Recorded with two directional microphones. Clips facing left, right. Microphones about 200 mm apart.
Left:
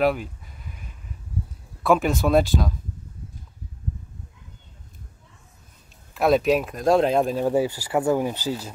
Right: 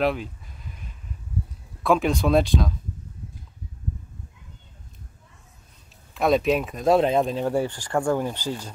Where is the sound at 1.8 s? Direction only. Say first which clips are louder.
Left 1 dB; centre (ahead or behind).